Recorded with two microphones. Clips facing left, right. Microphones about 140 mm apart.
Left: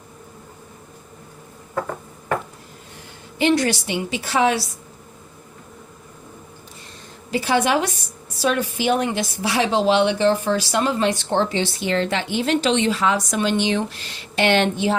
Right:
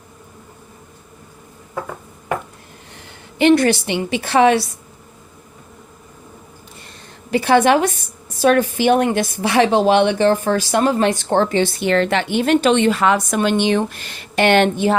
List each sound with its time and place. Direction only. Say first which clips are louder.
3.3 s a woman's voice: right 6 dB; 60° right (ahead or behind)
7.3 s a woman's voice: right 6 dB; 60° right (ahead or behind)